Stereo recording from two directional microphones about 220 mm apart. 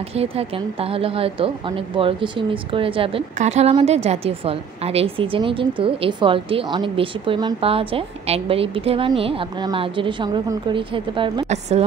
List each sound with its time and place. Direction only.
0.1 s a woman's voice: 25° right (ahead or behind)